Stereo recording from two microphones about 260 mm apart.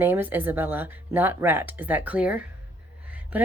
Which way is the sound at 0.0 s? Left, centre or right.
Centre.